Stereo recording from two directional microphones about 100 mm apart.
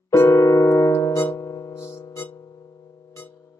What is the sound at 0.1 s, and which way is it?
Music, 30° left (ahead or behind).